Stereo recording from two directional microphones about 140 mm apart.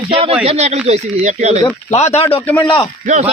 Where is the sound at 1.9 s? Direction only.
50° left (ahead or behind).